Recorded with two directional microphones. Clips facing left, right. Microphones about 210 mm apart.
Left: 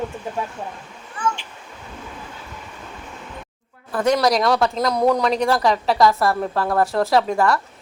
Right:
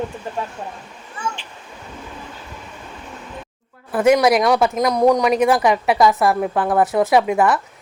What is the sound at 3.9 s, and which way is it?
Speech, 5° right (ahead or behind).